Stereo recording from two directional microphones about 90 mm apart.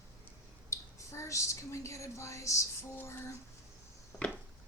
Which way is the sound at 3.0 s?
25° left (ahead or behind).